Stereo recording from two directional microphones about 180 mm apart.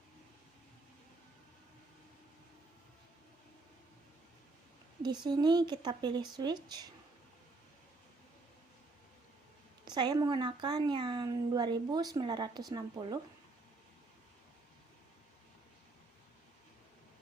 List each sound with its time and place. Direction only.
5.0 s a woman's voice: 25° right (ahead or behind)
9.8 s a woman's voice: 25° right (ahead or behind)